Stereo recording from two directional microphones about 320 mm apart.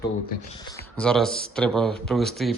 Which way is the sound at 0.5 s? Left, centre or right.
Centre.